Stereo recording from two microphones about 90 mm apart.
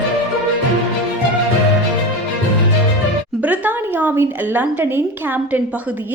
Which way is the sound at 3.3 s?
20° right (ahead or behind).